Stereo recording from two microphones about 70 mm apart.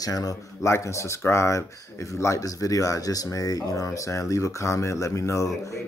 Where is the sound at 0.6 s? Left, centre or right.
Left.